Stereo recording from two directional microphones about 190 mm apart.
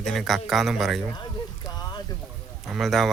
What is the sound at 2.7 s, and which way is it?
Speech, centre (ahead or behind).